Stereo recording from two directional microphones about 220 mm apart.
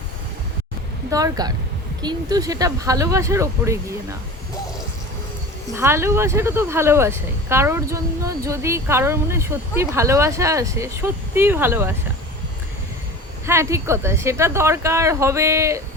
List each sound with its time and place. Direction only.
1.1 s speech: 15° right (ahead or behind)
5.7 s speech: 10° right (ahead or behind)
13.4 s speech: 10° right (ahead or behind)